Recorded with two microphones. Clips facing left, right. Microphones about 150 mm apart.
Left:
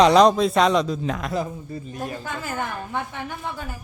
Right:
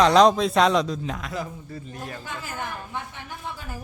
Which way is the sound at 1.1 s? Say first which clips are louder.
Left 5 dB; 60° left (ahead or behind).